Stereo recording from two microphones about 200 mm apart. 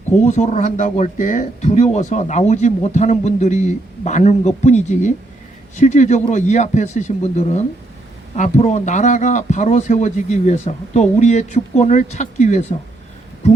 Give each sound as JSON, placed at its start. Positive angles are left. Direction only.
{"t": 0.3, "sound": "speech", "side_deg": 35}